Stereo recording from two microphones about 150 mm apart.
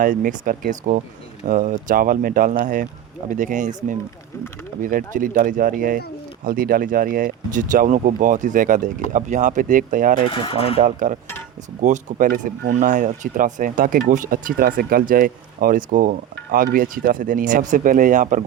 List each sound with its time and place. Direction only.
0.0 s speech: 60° right (ahead or behind)
4.8 s speech: 65° right (ahead or behind)
10.3 s speech: 40° left (ahead or behind)
10.8 s speech: 60° right (ahead or behind)